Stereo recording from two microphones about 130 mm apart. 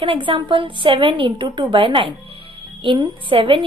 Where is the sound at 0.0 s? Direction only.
40° right (ahead or behind).